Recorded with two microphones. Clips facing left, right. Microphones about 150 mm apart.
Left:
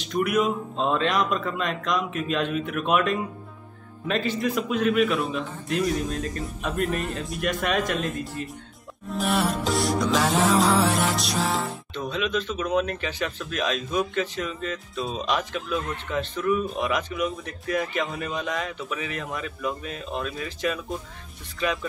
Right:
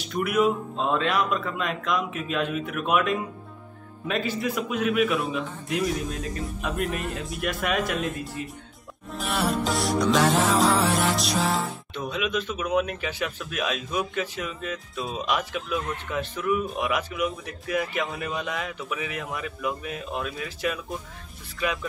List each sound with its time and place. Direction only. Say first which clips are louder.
0.1 s a man's voice: even; 5° right (ahead or behind)
11.9 s speech: left 1 dB; 10° right (ahead or behind)